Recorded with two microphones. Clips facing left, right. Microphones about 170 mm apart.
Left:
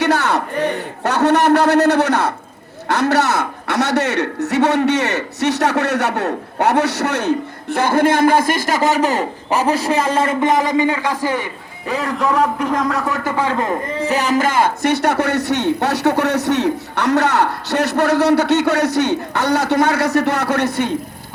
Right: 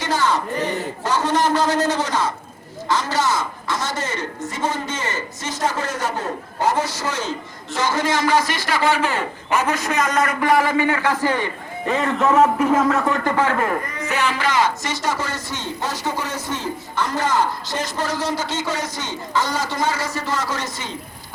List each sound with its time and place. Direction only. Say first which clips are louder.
0.0 s a sound: left 4 dB; 65° left (ahead or behind)
2.9 s a man's voice: left 5 dB; 65° left (ahead or behind); by 11.5 s 10° left (ahead or behind)
11.9 s a man's voice: even; centre (ahead or behind)
13.3 s speech: left 1 dB; 15° left (ahead or behind)
14.1 s a man's voice: left 4 dB; 40° left (ahead or behind); by 20.9 s 60° left (ahead or behind)